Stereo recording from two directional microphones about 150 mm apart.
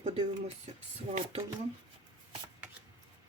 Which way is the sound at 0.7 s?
45° right (ahead or behind).